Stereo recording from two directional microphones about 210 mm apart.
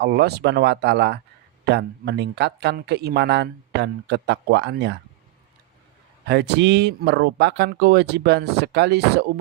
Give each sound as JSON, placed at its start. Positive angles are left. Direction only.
{"t": 0.0, "sound": "speech", "side_deg": -50}
{"t": 6.2, "sound": "speech", "side_deg": -55}